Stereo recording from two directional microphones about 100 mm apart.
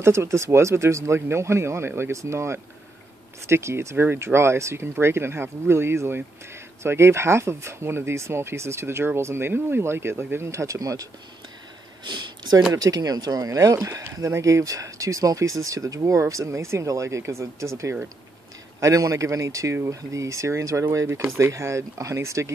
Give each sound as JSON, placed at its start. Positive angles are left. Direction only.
{"t": 0.0, "sound": "speech", "side_deg": -30}
{"t": 12.0, "sound": "speech", "side_deg": -45}